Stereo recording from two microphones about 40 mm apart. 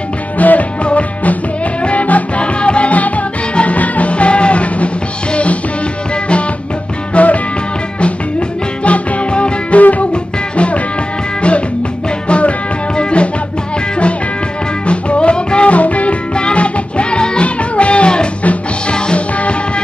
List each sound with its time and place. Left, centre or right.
0.4 s music: left
7.2 s music: left
9.8 s music: left
12.3 s music: left
14.9 s music: left
18.4 s music: left
18.9 s music: left